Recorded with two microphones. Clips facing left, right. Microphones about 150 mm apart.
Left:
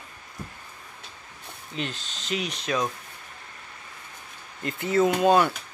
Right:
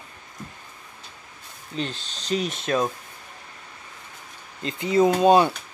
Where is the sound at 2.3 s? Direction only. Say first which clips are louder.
Right 4 dB; 45° right (ahead or behind).